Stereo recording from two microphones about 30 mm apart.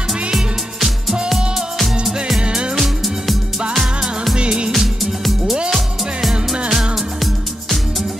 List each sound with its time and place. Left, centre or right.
1.3 s music: centre
2.4 s music: right
3.7 s music: centre
4.4 s music: right
4.7 s music: centre